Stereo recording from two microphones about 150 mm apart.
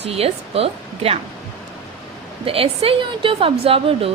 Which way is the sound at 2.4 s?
40° right (ahead or behind).